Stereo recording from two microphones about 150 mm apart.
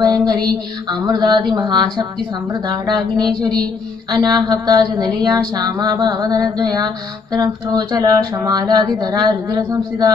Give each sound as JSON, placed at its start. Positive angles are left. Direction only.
{"t": 0.0, "sound": "music", "side_deg": -25}
{"t": 1.0, "sound": "speech", "side_deg": -25}